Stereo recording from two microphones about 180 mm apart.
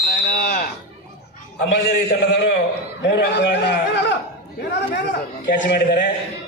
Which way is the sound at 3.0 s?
75° left (ahead or behind).